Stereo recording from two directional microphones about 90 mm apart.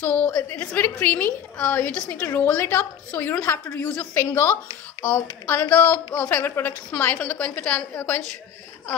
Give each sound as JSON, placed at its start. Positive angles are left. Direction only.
{"t": 0.0, "sound": "a woman's voice", "side_deg": 15}